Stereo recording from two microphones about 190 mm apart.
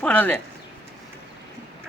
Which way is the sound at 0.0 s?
10° left (ahead or behind).